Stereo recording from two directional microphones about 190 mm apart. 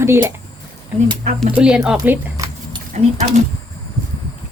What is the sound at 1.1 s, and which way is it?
Speech, 35° right (ahead or behind).